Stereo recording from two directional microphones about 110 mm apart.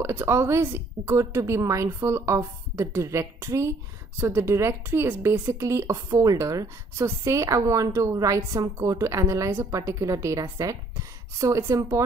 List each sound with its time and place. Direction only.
0.0 s a woman's voice: 20° right (ahead or behind)